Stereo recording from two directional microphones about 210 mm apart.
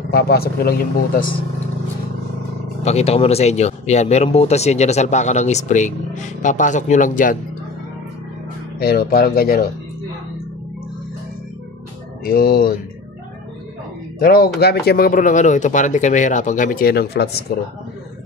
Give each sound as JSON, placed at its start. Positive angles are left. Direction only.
{"t": 0.1, "sound": "speech", "side_deg": 50}
{"t": 2.8, "sound": "speech", "side_deg": 30}
{"t": 8.7, "sound": "speech", "side_deg": 45}
{"t": 12.3, "sound": "speech", "side_deg": 45}
{"t": 14.2, "sound": "speech", "side_deg": 45}